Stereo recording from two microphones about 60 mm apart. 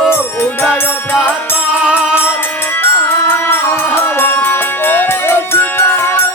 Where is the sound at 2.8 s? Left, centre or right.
Left.